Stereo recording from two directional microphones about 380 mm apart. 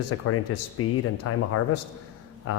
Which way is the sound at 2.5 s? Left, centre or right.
Left.